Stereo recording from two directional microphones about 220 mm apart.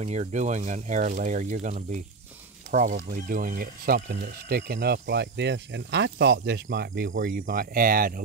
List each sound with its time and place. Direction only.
0.0 s speech: 30° right (ahead or behind)